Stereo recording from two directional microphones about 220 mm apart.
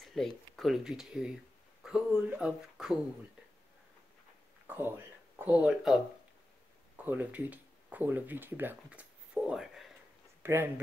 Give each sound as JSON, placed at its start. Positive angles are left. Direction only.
{"t": 0.0, "sound": "speech", "side_deg": 0}
{"t": 4.6, "sound": "speech", "side_deg": -10}
{"t": 7.1, "sound": "speech", "side_deg": -5}